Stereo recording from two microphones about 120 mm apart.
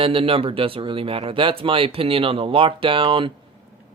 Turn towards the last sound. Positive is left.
turn(degrees=-45)  # may be behind; listen again after turning